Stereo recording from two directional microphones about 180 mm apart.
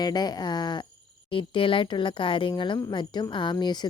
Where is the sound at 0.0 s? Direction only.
20° left (ahead or behind).